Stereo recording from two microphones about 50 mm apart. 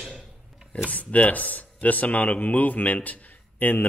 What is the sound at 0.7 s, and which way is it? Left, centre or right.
Speech, left.